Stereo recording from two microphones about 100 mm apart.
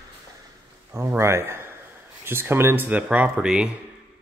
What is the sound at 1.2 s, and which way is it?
Speech, 25° right (ahead or behind).